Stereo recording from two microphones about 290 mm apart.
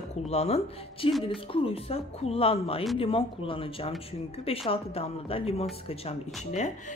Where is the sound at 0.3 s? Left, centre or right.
Left.